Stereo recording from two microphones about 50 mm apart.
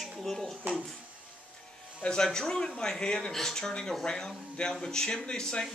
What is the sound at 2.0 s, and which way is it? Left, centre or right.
Speech, centre.